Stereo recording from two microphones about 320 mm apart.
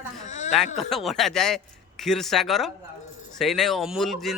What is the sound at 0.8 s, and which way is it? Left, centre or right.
Speech, centre.